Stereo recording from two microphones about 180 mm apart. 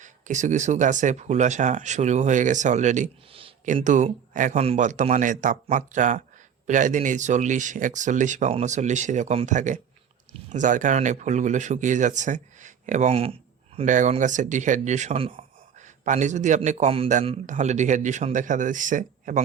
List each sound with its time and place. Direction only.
0.0 s speech: 40° right (ahead or behind)
13.7 s a man's voice: 45° right (ahead or behind)